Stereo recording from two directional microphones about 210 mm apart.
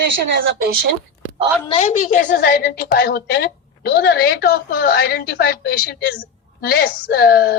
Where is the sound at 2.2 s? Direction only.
50° left (ahead or behind).